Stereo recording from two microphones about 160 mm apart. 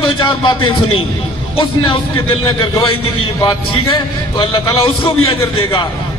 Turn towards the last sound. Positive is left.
turn(degrees=35)  # may be behind; listen again after turning